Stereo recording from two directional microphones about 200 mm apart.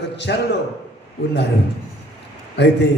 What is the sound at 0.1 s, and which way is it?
Speech, 60° left (ahead or behind).